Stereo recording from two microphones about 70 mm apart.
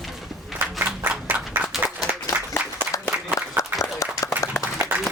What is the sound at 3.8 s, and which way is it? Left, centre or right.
Applause, left.